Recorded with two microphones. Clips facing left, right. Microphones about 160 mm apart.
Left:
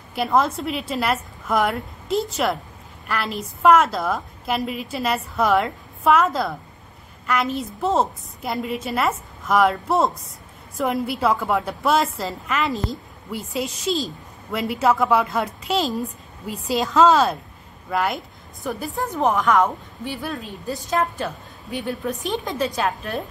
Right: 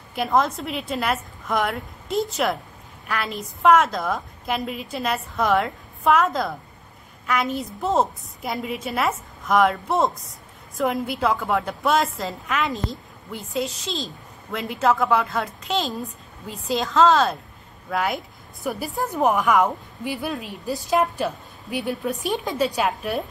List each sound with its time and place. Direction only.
0.1 s a woman's voice: centre (ahead or behind)
13.8 s a woman's voice: 45° left (ahead or behind)
14.5 s a woman's voice: 5° left (ahead or behind)
20.0 s a woman's voice: 15° right (ahead or behind)